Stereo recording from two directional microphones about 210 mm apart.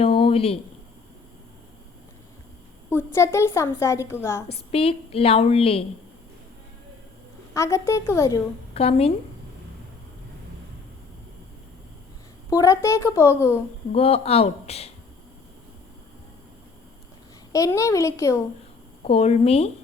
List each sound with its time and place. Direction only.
0.0 s a sound: 25° left (ahead or behind)
2.9 s a woman's voice: 10° left (ahead or behind)
4.5 s a woman's voice: 30° left (ahead or behind)
7.5 s a woman's voice: 15° left (ahead or behind)
8.7 s a woman's voice: 25° left (ahead or behind)
12.5 s a woman's voice: 15° left (ahead or behind)
13.9 s a woman's voice: 30° left (ahead or behind)
17.5 s a woman's voice: 15° left (ahead or behind)
19.0 s a woman's voice: 30° left (ahead or behind)